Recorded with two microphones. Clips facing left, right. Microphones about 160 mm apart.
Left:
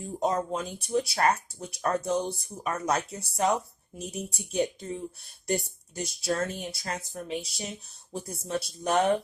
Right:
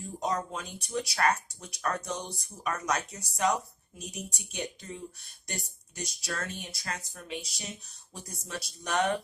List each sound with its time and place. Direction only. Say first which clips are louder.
0.2 s speech: left 5 dB; 25° left (ahead or behind)
6.0 s speech: left 8 dB; 25° left (ahead or behind)